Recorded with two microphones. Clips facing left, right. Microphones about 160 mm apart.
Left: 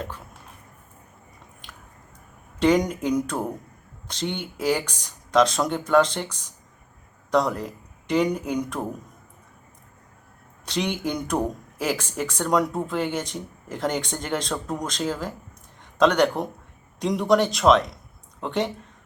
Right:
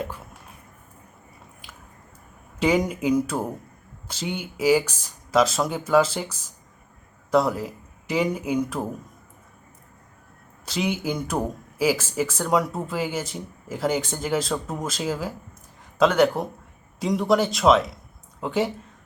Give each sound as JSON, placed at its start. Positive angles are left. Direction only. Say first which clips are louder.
{"t": 1.6, "sound": "biting", "louder": "left 1 dB", "side_deg": -5}
{"t": 2.6, "sound": "speech", "louder": "left 2 dB", "side_deg": -5}
{"t": 10.7, "sound": "speech", "louder": "even", "side_deg": -5}